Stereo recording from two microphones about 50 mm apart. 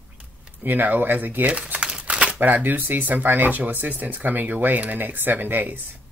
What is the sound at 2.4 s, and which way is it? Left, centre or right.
Speech, right.